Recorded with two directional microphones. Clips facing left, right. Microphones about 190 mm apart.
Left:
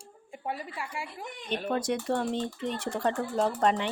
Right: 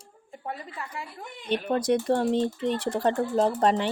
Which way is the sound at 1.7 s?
35° right (ahead or behind).